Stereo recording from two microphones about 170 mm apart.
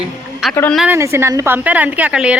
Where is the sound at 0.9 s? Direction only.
15° right (ahead or behind).